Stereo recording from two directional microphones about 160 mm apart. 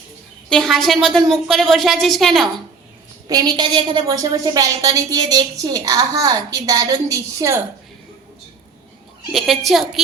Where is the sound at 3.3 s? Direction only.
25° right (ahead or behind).